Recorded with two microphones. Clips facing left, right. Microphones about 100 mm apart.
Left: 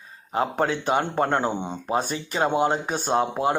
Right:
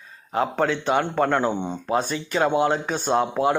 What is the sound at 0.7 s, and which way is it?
Speech, 40° left (ahead or behind).